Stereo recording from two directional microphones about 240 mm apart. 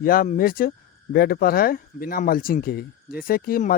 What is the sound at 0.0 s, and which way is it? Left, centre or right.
Speech, left.